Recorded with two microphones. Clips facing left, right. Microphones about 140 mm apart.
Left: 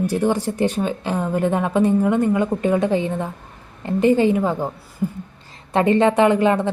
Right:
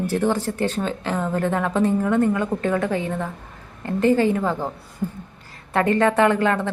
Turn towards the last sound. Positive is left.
turn(degrees=15)  # may be behind; listen again after turning